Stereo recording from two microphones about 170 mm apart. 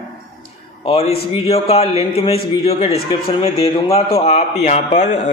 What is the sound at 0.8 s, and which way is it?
A man's voice, 40° left (ahead or behind).